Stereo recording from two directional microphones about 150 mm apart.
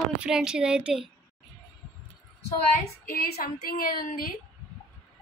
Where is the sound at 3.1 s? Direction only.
85° left.